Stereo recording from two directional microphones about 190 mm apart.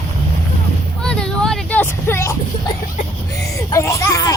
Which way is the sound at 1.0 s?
5° left (ahead or behind).